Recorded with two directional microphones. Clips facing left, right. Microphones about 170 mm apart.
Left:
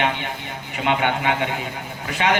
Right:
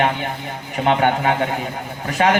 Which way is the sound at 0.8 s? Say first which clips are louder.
Right 4 dB; 40° right (ahead or behind).